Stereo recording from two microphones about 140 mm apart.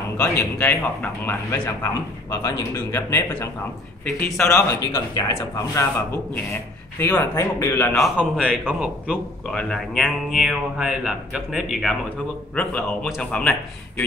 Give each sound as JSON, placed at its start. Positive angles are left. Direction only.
{"t": 0.2, "sound": "a man's voice", "side_deg": 15}
{"t": 7.0, "sound": "a man's voice", "side_deg": 15}
{"t": 7.9, "sound": "speech", "side_deg": 0}
{"t": 8.6, "sound": "a man's voice", "side_deg": -5}
{"t": 9.5, "sound": "speech", "side_deg": 5}
{"t": 12.5, "sound": "a man's voice", "side_deg": 10}